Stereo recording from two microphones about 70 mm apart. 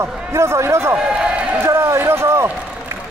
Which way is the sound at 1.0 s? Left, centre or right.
Centre.